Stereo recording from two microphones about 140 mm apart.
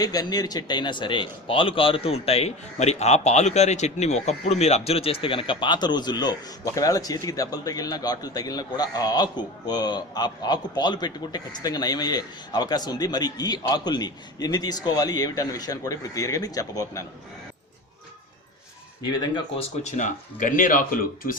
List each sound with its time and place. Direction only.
0.0 s a man's voice: 25° left (ahead or behind)
19.2 s speech: 30° left (ahead or behind)
19.8 s speech: 65° left (ahead or behind); by 21.3 s 85° left